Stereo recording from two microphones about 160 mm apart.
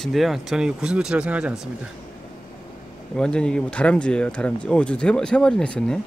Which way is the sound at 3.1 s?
5° left (ahead or behind).